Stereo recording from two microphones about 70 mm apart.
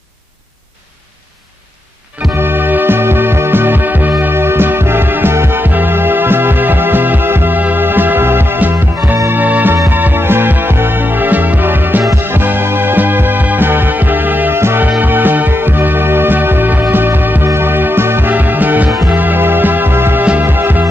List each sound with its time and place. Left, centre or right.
2.3 s music: right
14.8 s music: right